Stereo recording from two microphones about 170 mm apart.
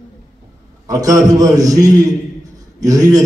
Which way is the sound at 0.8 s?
20° right (ahead or behind).